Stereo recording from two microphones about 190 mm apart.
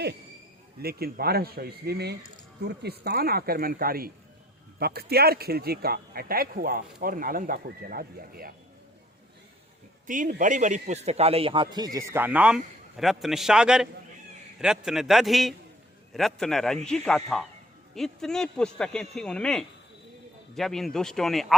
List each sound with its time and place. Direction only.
0.8 s speech: 55° right (ahead or behind)
10.1 s speech: 45° right (ahead or behind); by 21.4 s centre (ahead or behind)